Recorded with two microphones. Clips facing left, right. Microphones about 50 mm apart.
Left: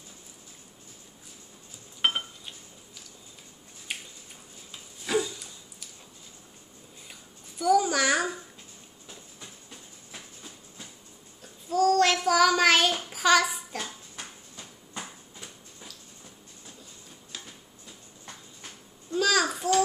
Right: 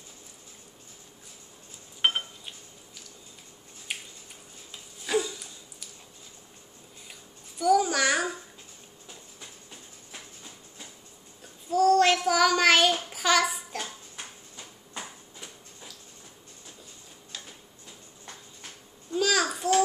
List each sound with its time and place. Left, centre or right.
2.0 s dishes: centre
3.9 s a sound: centre
5.0 s dog: centre
7.1 s babbling: centre
11.7 s child singing: centre
15.0 s a sound: centre
19.1 s babbling: centre